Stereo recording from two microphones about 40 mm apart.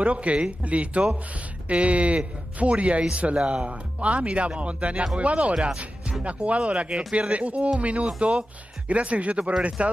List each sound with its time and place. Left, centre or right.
0.0 s speech: right